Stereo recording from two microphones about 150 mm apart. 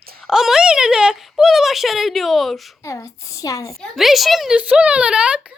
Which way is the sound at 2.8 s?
20° left (ahead or behind).